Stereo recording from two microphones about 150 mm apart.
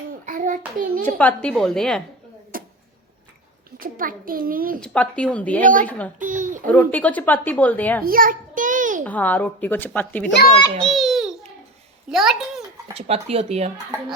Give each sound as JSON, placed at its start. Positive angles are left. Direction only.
{"t": 0.3, "sound": "child singing", "side_deg": -60}
{"t": 1.0, "sound": "a woman's voice", "side_deg": 10}
{"t": 2.5, "sound": "a sound", "side_deg": -70}
{"t": 3.8, "sound": "a child's voice", "side_deg": -70}
{"t": 4.8, "sound": "a woman's voice", "side_deg": 10}
{"t": 6.1, "sound": "a child's voice", "side_deg": -60}
{"t": 6.7, "sound": "a woman's voice", "side_deg": 10}
{"t": 8.0, "sound": "a sound", "side_deg": -70}
{"t": 9.0, "sound": "a woman's voice", "side_deg": 10}
{"t": 12.9, "sound": "speech", "side_deg": -40}